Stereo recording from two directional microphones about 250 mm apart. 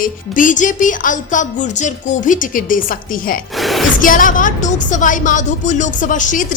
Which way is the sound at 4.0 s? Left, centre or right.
Left.